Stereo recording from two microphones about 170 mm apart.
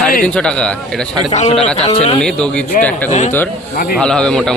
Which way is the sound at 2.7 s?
50° left (ahead or behind).